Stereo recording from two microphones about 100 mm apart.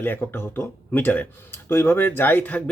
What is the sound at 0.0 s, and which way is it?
Speech, 20° left (ahead or behind).